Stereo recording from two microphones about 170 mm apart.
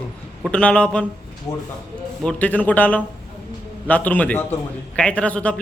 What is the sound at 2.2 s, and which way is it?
A man's voice, 5° left (ahead or behind).